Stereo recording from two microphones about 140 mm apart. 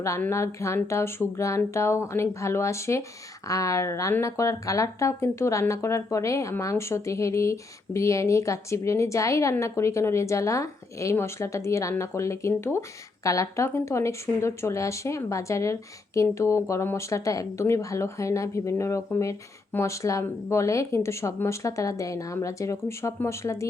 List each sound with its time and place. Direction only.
0.0 s speech: 20° left (ahead or behind)